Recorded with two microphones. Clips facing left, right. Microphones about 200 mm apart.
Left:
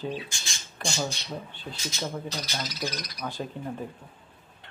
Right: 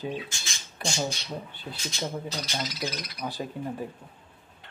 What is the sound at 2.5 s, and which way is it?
Speech, 15° right (ahead or behind).